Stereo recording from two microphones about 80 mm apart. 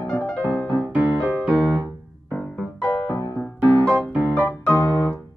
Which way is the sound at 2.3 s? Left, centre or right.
Left.